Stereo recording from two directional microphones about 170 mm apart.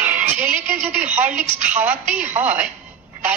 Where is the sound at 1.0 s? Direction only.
10° right (ahead or behind).